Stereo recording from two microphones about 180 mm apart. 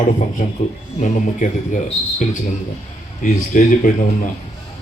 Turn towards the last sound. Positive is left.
turn(degrees=45)  # may be behind; listen again after turning